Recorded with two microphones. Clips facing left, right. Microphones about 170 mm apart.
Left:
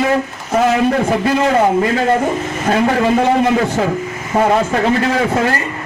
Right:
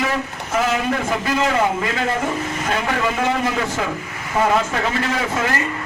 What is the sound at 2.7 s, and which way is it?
A man's voice, 35° left (ahead or behind).